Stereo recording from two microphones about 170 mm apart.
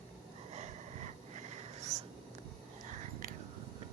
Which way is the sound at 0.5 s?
40° right (ahead or behind).